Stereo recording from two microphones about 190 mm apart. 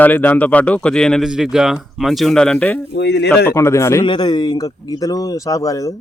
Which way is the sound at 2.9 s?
65° left (ahead or behind).